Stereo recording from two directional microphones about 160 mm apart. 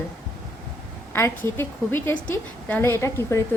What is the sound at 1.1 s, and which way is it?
A woman's voice, 15° left (ahead or behind).